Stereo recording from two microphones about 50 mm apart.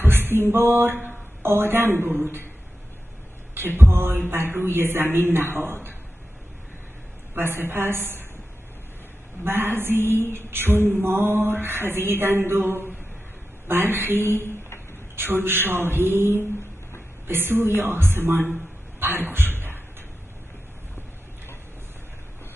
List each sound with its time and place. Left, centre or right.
0.0 s a sound: right
1.4 s mantra: right
3.5 s mantra: right
7.3 s mantra: right
9.4 s mantra: right
18.9 s a sound: right